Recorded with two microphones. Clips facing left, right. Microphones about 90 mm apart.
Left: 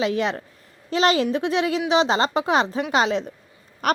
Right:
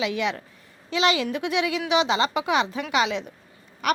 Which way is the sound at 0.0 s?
35° left (ahead or behind).